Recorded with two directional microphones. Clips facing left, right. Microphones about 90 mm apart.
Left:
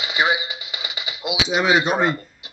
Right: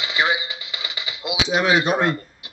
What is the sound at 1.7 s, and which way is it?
Speech, 25° left (ahead or behind).